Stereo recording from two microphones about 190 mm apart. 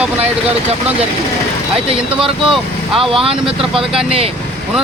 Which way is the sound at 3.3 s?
5° right (ahead or behind).